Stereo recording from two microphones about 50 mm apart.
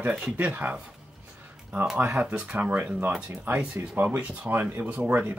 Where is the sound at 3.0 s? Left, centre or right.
Right.